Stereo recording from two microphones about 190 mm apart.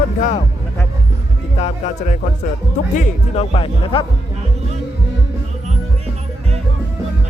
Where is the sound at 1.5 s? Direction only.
35° left (ahead or behind).